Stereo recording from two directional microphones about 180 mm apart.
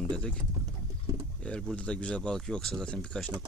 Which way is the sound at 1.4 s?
5° left (ahead or behind).